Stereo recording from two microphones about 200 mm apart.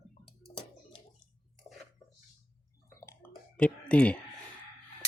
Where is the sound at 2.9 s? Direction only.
15° left (ahead or behind).